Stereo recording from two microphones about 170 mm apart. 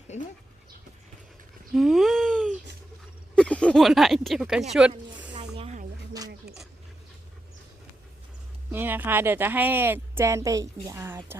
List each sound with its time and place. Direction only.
0.1 s speech: 45° left (ahead or behind)
1.7 s babbling: centre (ahead or behind)
3.3 s speech: 5° left (ahead or behind)
5.5 s a sound: 40° right (ahead or behind)
8.7 s speech: 10° right (ahead or behind)